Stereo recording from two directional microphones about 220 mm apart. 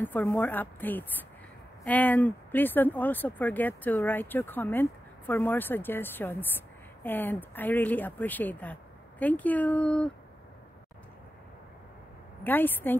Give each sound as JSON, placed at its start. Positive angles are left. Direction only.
{"t": 0.0, "sound": "speech", "side_deg": 10}
{"t": 12.4, "sound": "speech", "side_deg": 10}